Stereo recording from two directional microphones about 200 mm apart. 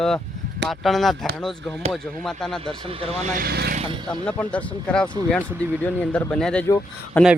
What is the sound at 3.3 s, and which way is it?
Speech, 50° right (ahead or behind).